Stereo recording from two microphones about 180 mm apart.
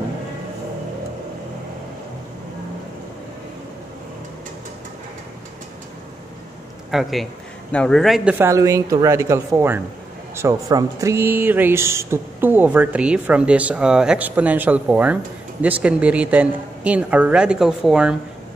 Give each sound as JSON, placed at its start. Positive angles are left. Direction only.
{"t": 6.9, "sound": "speech", "side_deg": 0}
{"t": 8.4, "sound": "speech", "side_deg": -15}